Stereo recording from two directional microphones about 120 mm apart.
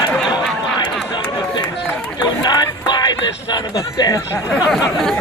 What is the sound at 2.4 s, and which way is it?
Music, 40° left (ahead or behind).